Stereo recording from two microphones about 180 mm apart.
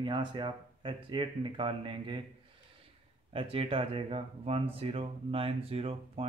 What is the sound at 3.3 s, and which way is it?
Speech, 30° right (ahead or behind).